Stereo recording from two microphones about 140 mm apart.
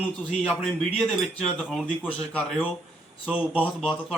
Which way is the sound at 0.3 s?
5° left (ahead or behind).